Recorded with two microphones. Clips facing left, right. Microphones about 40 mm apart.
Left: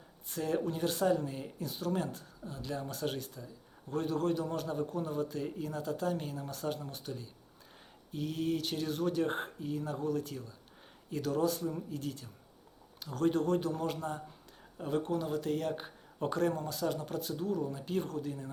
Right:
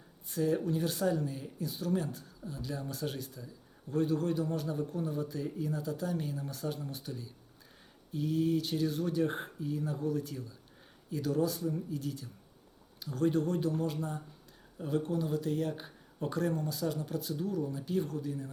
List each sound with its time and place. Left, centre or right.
0.3 s a man's voice: left